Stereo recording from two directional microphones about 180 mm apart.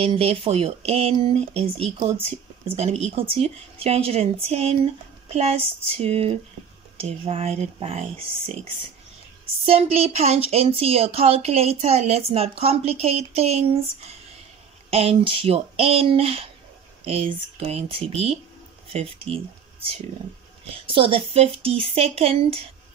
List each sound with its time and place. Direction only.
0.0 s speech: 35° right (ahead or behind)
9.7 s speech: 35° right (ahead or behind)
20.7 s speech: 30° right (ahead or behind)